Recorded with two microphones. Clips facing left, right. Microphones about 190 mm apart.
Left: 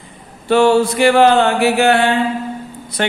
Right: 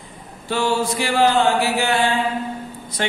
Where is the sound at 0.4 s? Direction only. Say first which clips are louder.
Left 9 dB; 65° left (ahead or behind).